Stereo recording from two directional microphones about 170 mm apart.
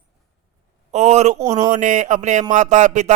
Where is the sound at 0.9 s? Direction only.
40° right (ahead or behind).